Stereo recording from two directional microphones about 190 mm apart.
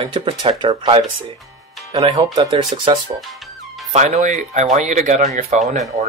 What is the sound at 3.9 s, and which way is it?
Speech, 40° right (ahead or behind).